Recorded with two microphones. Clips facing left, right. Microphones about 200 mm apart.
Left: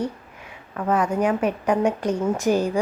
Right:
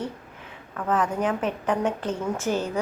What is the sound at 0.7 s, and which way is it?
A woman's voice, 10° left (ahead or behind).